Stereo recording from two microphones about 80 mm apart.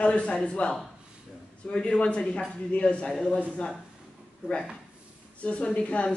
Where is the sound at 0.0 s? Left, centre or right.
Centre.